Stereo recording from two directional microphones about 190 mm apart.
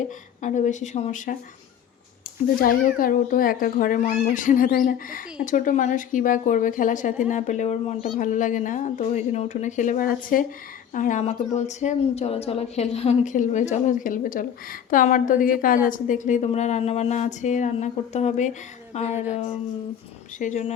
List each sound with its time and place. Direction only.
0.4 s a woman's voice: 40° left (ahead or behind)
2.6 s a woman's voice: 50° left (ahead or behind)
19.1 s speech: 10° right (ahead or behind)
20.4 s a woman's voice: 40° left (ahead or behind)